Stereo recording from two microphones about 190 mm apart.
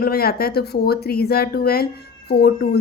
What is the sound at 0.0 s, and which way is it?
Speech, 55° left (ahead or behind).